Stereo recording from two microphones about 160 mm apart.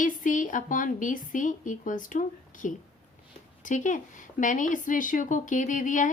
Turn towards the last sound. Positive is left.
turn(degrees=50)  # may be behind; listen again after turning